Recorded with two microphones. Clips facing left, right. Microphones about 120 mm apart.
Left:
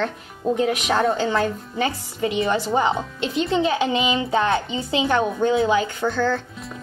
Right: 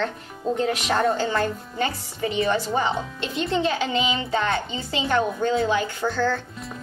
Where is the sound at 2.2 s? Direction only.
20° left (ahead or behind).